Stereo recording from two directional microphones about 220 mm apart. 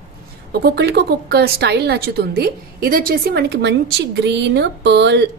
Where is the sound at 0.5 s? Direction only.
45° right (ahead or behind).